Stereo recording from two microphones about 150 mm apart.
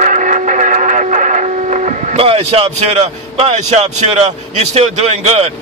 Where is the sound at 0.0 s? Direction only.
55° right (ahead or behind).